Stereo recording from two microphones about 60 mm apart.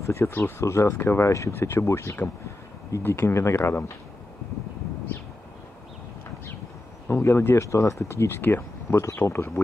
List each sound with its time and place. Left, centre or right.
0.0 s speech: left
3.0 s speech: left
7.1 s speech: left
7.6 s speech: left